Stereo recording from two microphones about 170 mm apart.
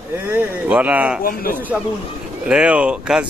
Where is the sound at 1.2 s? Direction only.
55° left (ahead or behind).